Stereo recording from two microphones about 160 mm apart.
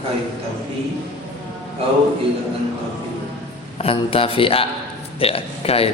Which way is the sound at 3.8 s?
35° left (ahead or behind).